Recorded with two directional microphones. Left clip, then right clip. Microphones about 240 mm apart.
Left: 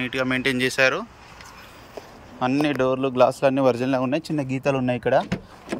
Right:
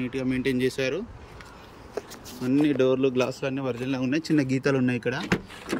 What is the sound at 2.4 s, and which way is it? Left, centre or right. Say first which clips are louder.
Speech: left 1 dB; centre.